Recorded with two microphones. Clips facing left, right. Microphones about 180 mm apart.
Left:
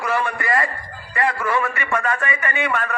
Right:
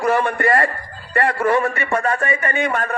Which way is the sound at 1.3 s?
40° right (ahead or behind).